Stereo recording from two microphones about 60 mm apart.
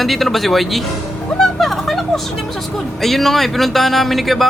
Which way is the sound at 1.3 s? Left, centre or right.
Centre.